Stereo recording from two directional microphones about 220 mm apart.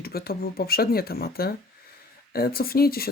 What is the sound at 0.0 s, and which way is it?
Speech, 45° left (ahead or behind).